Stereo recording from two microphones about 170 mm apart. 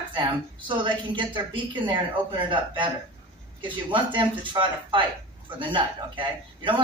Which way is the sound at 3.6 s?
30° right (ahead or behind).